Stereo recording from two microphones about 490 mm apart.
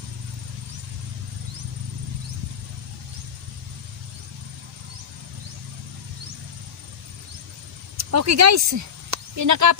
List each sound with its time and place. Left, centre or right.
7.9 s speech: right